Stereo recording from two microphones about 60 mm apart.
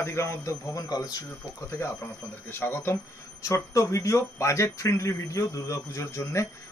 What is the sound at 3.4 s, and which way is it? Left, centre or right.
Speech, left.